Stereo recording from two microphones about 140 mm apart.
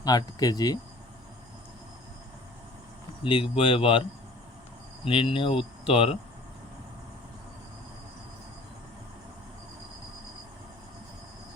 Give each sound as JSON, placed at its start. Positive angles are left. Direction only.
{"t": 0.0, "sound": "speech", "side_deg": 30}
{"t": 3.2, "sound": "speech", "side_deg": 40}
{"t": 5.0, "sound": "cricket", "side_deg": 40}